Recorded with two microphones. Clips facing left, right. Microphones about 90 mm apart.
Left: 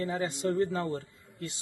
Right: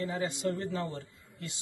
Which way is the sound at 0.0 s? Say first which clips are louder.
Left 2 dB; 40° left (ahead or behind).